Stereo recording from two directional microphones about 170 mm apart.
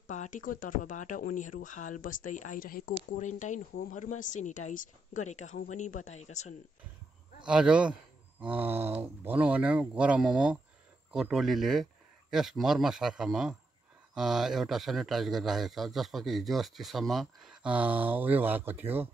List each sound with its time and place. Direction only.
0.0 s speech: 50° left (ahead or behind)
7.4 s a man's voice: 5° right (ahead or behind)